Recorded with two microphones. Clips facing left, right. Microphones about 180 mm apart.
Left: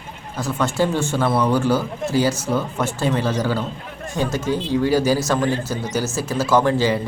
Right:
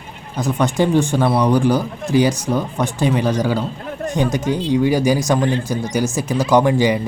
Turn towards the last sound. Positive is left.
turn(degrees=-15)  # may be behind; listen again after turning